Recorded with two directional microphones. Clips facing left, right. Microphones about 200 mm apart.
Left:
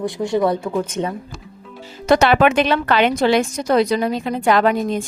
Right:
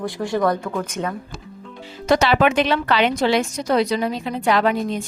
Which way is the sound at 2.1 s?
50° left (ahead or behind).